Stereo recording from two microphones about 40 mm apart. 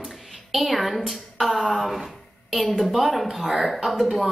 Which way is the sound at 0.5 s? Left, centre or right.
Centre.